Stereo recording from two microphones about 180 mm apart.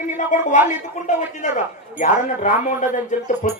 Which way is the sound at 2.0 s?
45° left (ahead or behind).